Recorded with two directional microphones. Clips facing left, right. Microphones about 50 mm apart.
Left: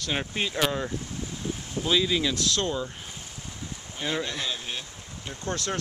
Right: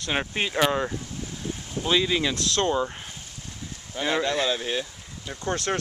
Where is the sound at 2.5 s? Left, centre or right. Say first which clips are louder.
Right 5 dB; right.